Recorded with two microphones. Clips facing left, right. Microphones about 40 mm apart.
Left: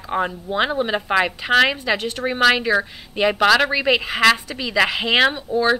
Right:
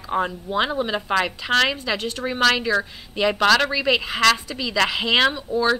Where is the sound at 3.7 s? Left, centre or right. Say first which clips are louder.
Left 2 dB; centre.